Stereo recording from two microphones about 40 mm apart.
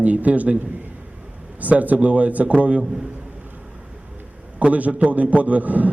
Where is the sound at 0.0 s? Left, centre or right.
Right.